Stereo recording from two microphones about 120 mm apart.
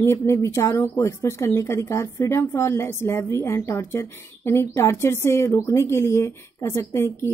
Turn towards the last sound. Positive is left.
turn(degrees=20)  # may be behind; listen again after turning